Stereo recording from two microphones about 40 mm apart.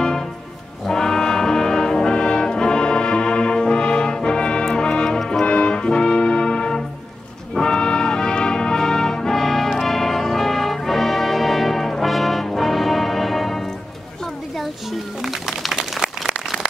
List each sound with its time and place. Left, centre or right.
0.0 s music: centre
0.8 s brass instrument: centre
4.6 s music: centre
5.4 s brass instrument: left; by 13.7 s centre
14.5 s a sound: centre